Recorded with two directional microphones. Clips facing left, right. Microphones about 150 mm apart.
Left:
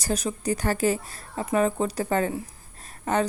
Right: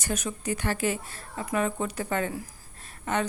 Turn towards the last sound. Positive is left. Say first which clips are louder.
# left 4 dB
turn(degrees=35)  # may be behind; listen again after turning